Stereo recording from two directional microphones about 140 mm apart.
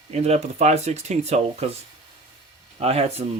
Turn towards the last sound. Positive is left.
turn(degrees=-45)  # may be behind; listen again after turning